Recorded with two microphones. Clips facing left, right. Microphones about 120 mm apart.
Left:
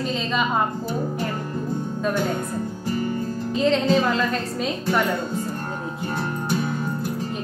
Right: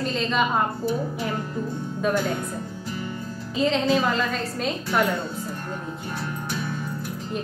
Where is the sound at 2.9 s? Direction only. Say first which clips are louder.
Left 8 dB; 50° left (ahead or behind).